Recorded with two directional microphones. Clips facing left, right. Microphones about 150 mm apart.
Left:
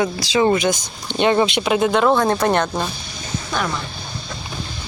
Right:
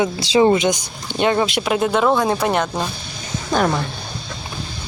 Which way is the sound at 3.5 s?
45° right (ahead or behind).